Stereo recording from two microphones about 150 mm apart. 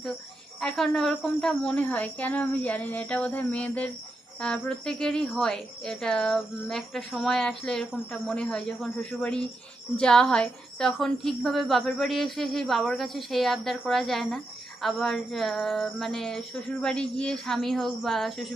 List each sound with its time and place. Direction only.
0.6 s a woman's voice: 5° left (ahead or behind)